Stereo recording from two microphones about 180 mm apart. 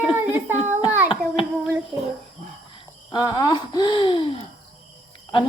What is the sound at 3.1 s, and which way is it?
Speech, 20° left (ahead or behind).